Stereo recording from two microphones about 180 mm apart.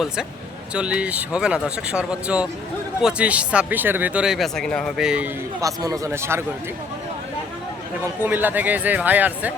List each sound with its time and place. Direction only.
0.7 s speech: 5° right (ahead or behind)
5.5 s a man's voice: 20° right (ahead or behind)
8.2 s a man's voice: 10° right (ahead or behind)